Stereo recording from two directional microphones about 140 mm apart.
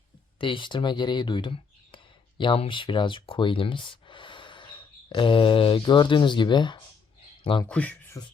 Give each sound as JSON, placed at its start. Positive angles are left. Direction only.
{"t": 0.3, "sound": "speech", "side_deg": 35}
{"t": 7.7, "sound": "speech", "side_deg": 10}